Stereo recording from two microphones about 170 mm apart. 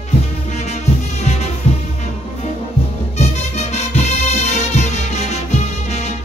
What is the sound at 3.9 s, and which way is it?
Music, 40° left (ahead or behind).